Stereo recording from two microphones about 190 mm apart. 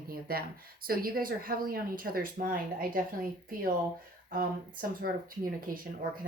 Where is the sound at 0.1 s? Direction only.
50° right (ahead or behind).